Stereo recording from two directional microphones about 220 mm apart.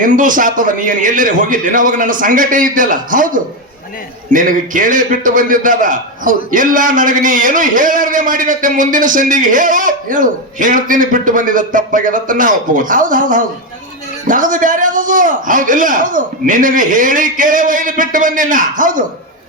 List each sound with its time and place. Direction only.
0.0 s a man's voice: 35° right (ahead or behind)